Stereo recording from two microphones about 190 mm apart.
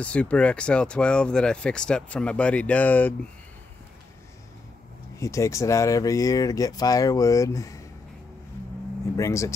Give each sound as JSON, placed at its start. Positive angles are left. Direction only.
{"t": 0.0, "sound": "speech", "side_deg": 5}
{"t": 5.1, "sound": "speech", "side_deg": 15}
{"t": 9.1, "sound": "speech", "side_deg": 15}